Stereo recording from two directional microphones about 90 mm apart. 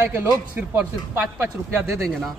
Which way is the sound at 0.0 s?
25° right (ahead or behind).